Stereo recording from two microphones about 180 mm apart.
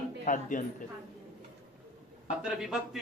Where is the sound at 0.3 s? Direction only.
45° left (ahead or behind).